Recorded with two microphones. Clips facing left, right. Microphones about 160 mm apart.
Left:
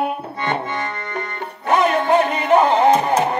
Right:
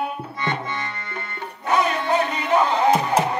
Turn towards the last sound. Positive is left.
turn(degrees=50)  # may be behind; listen again after turning